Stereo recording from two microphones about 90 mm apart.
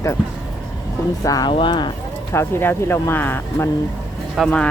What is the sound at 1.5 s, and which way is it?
Speech, 65° left (ahead or behind).